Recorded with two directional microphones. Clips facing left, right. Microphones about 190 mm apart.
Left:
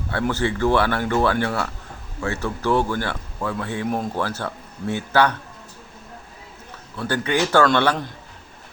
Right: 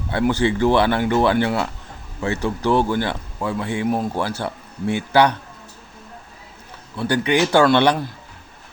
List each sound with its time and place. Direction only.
0.1 s speech: 15° right (ahead or behind)
6.9 s speech: 15° right (ahead or behind)